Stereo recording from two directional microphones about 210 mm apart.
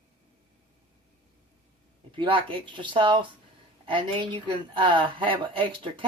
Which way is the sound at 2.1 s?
25° right (ahead or behind).